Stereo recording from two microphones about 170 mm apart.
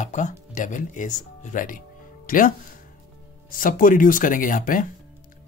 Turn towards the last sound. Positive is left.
turn(degrees=55)  # may be behind; listen again after turning